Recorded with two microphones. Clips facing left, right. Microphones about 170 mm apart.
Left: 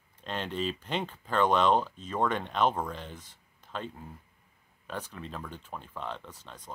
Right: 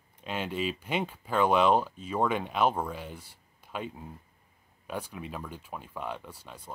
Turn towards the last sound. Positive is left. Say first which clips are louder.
# right 1 dB
turn(degrees=-10)  # may be behind; listen again after turning